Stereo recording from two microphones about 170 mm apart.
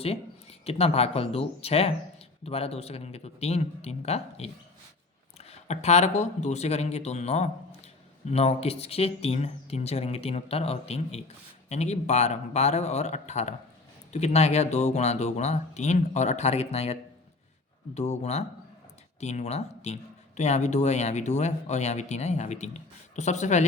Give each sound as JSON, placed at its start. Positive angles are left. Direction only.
{"t": 0.6, "sound": "speech", "side_deg": 35}